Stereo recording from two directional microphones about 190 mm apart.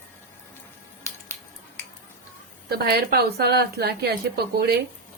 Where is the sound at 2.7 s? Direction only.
55° right (ahead or behind).